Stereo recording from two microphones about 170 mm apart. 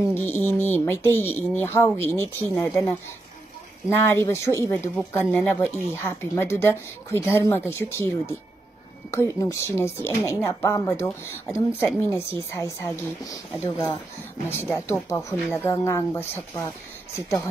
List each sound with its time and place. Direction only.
0.1 s speech: 10° left (ahead or behind)
3.9 s speech: 15° left (ahead or behind)